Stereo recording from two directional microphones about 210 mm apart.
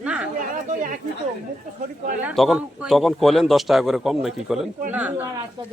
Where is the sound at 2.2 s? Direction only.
5° right (ahead or behind).